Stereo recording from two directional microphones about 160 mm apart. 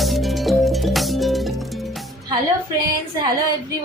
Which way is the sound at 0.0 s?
Centre (ahead or behind).